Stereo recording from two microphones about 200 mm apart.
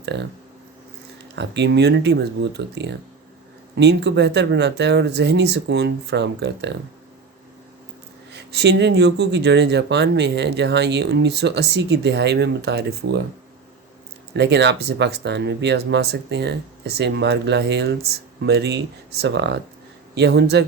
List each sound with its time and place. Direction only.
0.0 s speech: 60° right (ahead or behind)
1.4 s speech: 60° right (ahead or behind)
8.3 s speech: 60° right (ahead or behind)
14.3 s speech: 60° right (ahead or behind)